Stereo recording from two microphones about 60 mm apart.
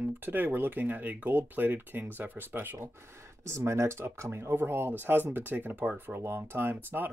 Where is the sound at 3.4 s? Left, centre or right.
Right.